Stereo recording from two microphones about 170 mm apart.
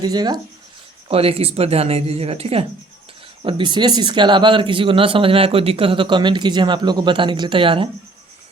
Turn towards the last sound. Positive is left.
turn(degrees=-30)  # may be behind; listen again after turning